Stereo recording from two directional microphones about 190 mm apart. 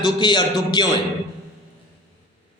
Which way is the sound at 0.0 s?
25° left (ahead or behind).